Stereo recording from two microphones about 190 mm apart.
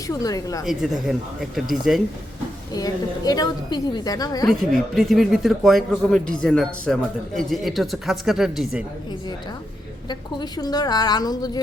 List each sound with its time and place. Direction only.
0.1 s a woman's voice: 20° left (ahead or behind)
0.6 s speech: centre (ahead or behind)
2.7 s a woman's voice: 20° left (ahead or behind)
4.4 s speech: centre (ahead or behind)
10.1 s a woman's voice: 20° left (ahead or behind)